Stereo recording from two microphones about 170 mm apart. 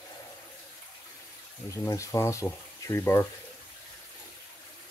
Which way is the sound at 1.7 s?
20° left (ahead or behind).